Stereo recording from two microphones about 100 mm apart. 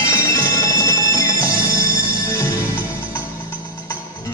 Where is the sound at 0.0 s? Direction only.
30° left (ahead or behind).